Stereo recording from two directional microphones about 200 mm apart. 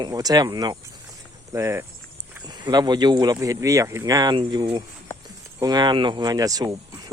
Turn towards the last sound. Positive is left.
turn(degrees=-20)  # may be behind; listen again after turning